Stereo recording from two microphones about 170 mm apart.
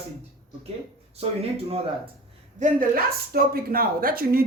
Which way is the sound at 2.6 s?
55° right (ahead or behind).